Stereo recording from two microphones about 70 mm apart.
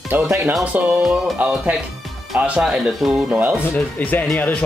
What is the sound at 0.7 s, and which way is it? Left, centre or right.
Music, centre.